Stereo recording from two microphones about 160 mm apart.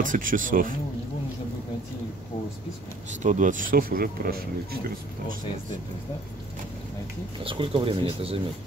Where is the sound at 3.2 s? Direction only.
50° right (ahead or behind); by 4.8 s 70° right (ahead or behind).